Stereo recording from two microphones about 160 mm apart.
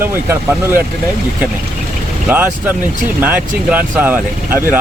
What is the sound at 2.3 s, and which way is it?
Speech, 10° right (ahead or behind).